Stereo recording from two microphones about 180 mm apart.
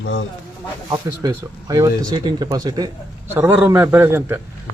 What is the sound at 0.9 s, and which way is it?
Speech, 20° right (ahead or behind).